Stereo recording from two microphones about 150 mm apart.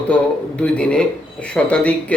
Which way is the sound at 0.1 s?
5° left (ahead or behind).